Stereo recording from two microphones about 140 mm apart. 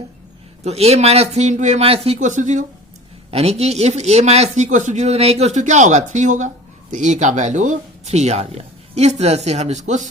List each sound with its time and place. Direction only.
0.6 s speech: 50° right (ahead or behind)
2.1 s speech: 65° right (ahead or behind)
3.3 s speech: 50° right (ahead or behind)